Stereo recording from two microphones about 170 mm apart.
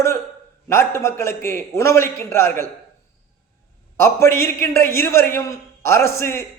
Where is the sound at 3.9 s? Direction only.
15° left (ahead or behind).